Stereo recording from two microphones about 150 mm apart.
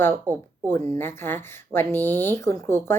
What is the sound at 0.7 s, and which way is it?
Speech, 15° left (ahead or behind).